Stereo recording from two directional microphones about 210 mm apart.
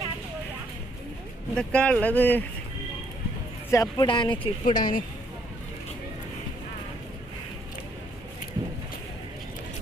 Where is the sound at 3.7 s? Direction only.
20° left (ahead or behind).